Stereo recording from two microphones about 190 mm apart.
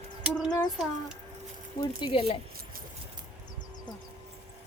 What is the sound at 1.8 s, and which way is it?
Speech, 30° left (ahead or behind).